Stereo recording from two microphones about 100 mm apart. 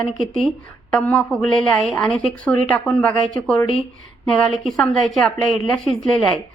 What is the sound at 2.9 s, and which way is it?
Speech, 15° left (ahead or behind).